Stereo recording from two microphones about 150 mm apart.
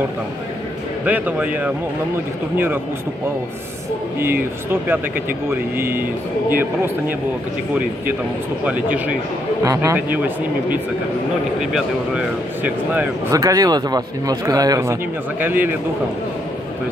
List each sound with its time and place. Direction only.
1.0 s speech: 10° right (ahead or behind)
4.2 s speech: 15° right (ahead or behind)
8.6 s speech: 10° right (ahead or behind)
12.6 s speech: 10° right (ahead or behind)
13.3 s speech: 25° right (ahead or behind)